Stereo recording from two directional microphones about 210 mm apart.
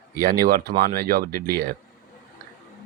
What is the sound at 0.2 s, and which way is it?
Speech, 45° right (ahead or behind).